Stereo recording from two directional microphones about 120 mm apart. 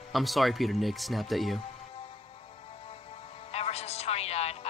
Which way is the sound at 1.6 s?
55° left (ahead or behind).